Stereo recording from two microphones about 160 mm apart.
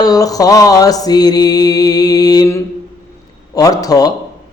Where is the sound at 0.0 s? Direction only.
20° left (ahead or behind).